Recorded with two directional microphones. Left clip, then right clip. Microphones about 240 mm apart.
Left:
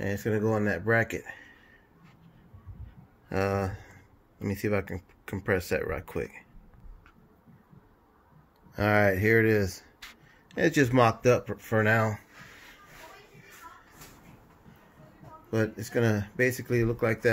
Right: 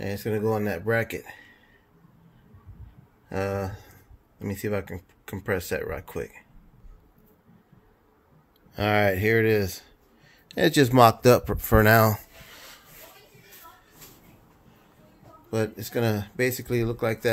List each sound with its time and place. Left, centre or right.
0.0 s speech: centre
3.3 s speech: centre
8.7 s speech: centre
10.5 s speech: centre; by 12.2 s right
15.5 s speech: centre